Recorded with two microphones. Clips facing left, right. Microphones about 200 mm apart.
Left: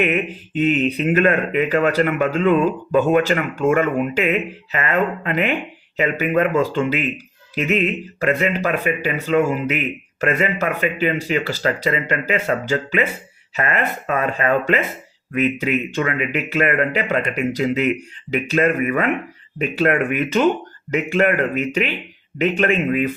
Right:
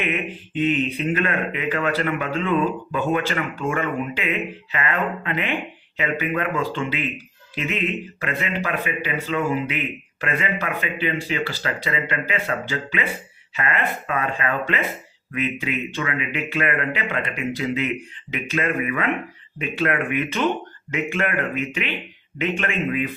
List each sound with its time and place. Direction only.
0.0 s speech: 40° left (ahead or behind)
14.1 s speech: 40° left (ahead or behind)